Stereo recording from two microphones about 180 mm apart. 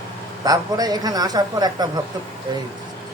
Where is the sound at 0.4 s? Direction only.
20° right (ahead or behind).